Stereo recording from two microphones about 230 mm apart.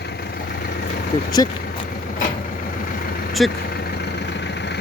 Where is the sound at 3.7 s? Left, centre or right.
Left.